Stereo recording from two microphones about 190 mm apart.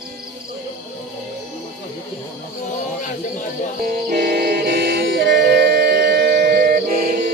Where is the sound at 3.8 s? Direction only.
50° right (ahead or behind).